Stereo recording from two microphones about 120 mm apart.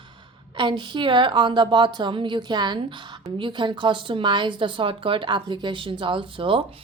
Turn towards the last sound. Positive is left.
turn(degrees=-45)  # may be behind; listen again after turning